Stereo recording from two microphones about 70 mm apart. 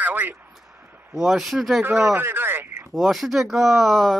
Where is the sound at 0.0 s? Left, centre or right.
Right.